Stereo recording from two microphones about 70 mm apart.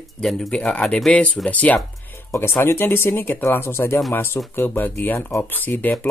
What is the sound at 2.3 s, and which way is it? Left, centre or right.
Speech, left.